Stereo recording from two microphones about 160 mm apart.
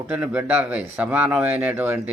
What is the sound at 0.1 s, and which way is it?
A man's voice, 10° right (ahead or behind).